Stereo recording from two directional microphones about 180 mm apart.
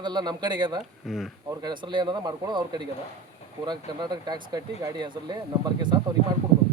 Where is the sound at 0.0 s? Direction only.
25° right (ahead or behind).